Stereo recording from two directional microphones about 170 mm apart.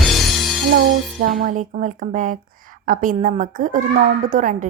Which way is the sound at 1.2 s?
55° right (ahead or behind).